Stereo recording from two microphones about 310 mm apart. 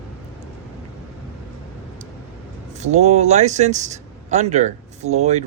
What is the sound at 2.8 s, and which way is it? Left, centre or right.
Speech, right.